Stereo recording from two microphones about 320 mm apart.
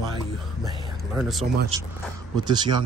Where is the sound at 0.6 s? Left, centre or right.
Centre.